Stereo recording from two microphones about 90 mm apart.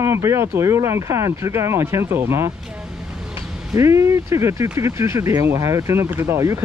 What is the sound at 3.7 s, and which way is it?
Speech, 35° right (ahead or behind).